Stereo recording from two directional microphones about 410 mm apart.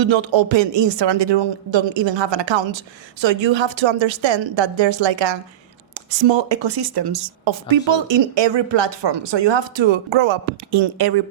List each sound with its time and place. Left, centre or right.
0.0 s speech: right
10.7 s speech: right